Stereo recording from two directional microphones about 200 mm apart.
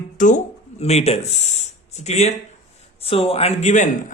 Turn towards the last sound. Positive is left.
turn(degrees=35)  # may be behind; listen again after turning